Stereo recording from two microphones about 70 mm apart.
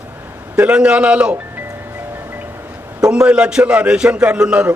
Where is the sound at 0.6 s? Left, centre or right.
Centre.